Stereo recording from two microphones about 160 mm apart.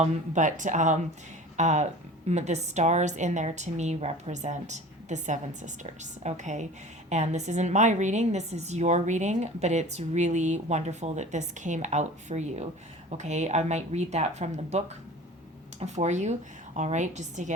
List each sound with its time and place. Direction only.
0.0 s a woman's voice: 50° right (ahead or behind)